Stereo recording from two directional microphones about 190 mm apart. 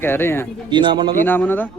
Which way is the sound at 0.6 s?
25° right (ahead or behind).